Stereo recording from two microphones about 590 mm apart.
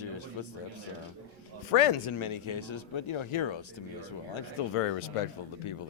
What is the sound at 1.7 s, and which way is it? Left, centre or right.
Speech, left.